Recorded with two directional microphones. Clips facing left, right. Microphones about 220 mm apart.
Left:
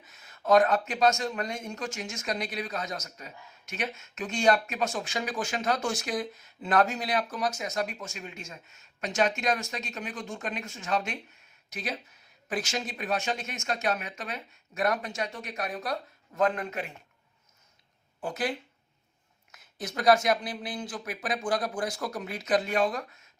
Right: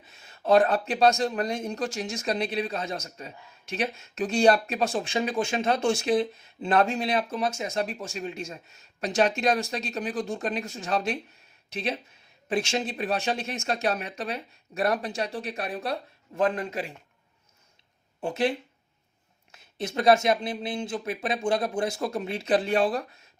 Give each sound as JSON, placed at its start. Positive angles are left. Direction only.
{"t": 0.0, "sound": "speech", "side_deg": -30}
{"t": 18.2, "sound": "speech", "side_deg": -25}